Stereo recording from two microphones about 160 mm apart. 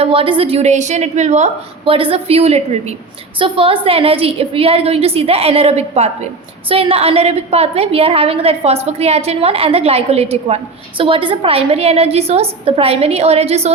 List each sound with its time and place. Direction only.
0.0 s a woman's voice: 35° right (ahead or behind)